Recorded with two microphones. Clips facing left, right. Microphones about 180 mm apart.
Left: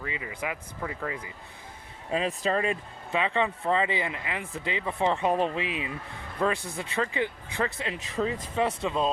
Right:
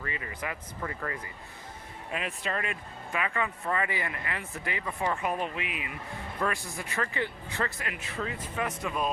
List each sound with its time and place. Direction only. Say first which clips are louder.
0.0 s vehicle: left 3 dB; 15° left (ahead or behind)
0.8 s speech: left 1 dB; 10° left (ahead or behind)
2.0 s speech: left 7 dB; 30° left (ahead or behind)
6.4 s speech: left 5 dB; 15° left (ahead or behind)